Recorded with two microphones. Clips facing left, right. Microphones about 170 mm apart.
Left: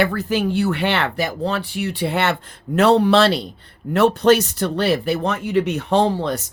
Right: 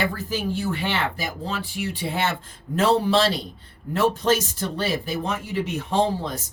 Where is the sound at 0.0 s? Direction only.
70° left (ahead or behind).